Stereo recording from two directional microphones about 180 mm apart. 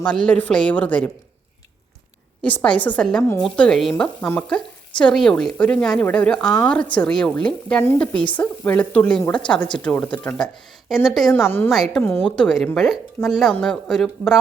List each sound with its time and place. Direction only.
0.0 s a woman's voice: 5° left (ahead or behind)
2.4 s a woman's voice: 5° left (ahead or behind)
11.4 s a woman's voice: 10° left (ahead or behind)
11.7 s a woman's voice: centre (ahead or behind)